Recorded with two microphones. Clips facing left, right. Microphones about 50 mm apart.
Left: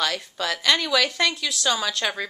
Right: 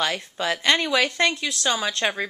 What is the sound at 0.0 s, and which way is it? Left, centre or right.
Speech, right.